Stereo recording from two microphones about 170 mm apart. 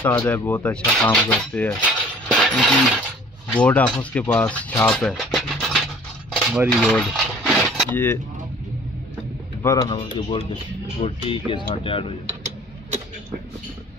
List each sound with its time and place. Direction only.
0.0 s speech: 10° left (ahead or behind)
1.8 s cutlery: 5° right (ahead or behind)
3.5 s speech: 5° left (ahead or behind)
6.4 s coin: 5° right (ahead or behind)
7.9 s speech: 15° left (ahead or behind)
9.6 s speech: 20° left (ahead or behind)